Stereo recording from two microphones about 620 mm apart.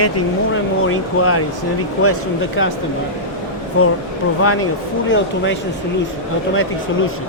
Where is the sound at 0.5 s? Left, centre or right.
Centre.